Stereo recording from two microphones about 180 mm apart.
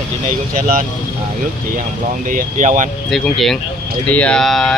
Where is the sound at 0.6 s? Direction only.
50° right (ahead or behind).